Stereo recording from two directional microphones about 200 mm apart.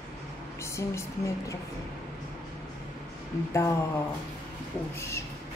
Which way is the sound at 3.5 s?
15° left (ahead or behind).